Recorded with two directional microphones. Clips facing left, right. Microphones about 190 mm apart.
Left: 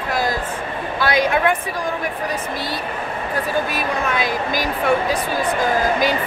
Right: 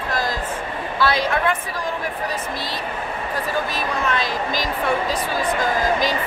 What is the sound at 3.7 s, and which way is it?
Speech, 10° left (ahead or behind).